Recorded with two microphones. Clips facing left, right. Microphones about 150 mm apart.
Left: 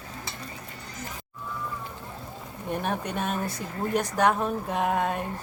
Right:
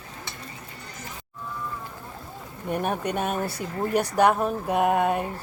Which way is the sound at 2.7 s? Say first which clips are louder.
Right 3 dB; 10° right (ahead or behind).